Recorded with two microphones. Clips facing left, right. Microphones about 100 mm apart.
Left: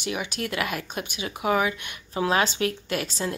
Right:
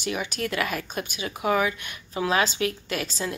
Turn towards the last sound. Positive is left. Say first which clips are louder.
# left 1 dB
turn(degrees=25)  # may be behind; listen again after turning